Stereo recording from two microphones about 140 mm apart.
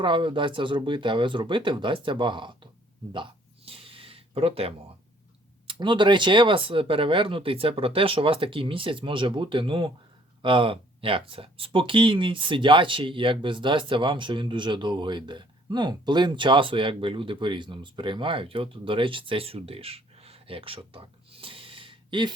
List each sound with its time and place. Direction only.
0.0 s speech: 35° right (ahead or behind)
3.7 s a sound: 40° right (ahead or behind)
5.6 s speech: 35° right (ahead or behind)